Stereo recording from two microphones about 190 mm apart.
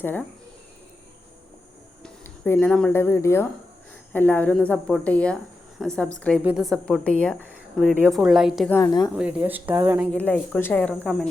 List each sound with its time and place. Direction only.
0.0 s a woman's voice: 10° left (ahead or behind)
2.0 s a woman's voice: 10° left (ahead or behind)
8.7 s a woman's voice: 20° left (ahead or behind)
9.1 s speech: 10° right (ahead or behind)
10.1 s speech: 5° left (ahead or behind)